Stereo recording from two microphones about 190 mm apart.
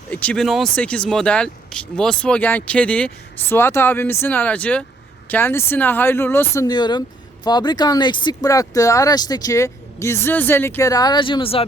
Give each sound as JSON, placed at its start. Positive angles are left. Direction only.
{"t": 0.1, "sound": "speech", "side_deg": 5}